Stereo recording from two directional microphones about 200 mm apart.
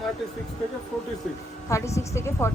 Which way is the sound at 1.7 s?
15° left (ahead or behind).